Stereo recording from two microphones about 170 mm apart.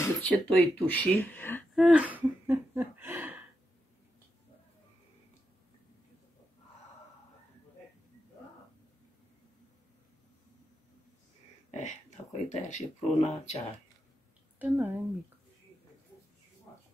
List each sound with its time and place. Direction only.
0.0 s speech: 10° left (ahead or behind)
1.8 s speech: 5° right (ahead or behind)
11.7 s speech: 45° left (ahead or behind)
14.6 s speech: 10° right (ahead or behind)